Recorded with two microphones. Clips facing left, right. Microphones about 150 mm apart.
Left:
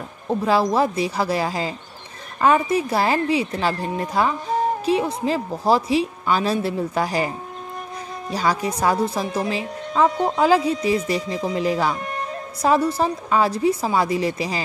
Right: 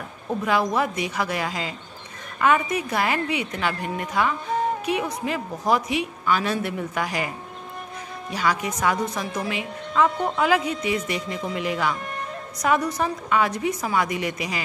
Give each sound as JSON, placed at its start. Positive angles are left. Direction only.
{"t": 0.3, "sound": "speech", "side_deg": 30}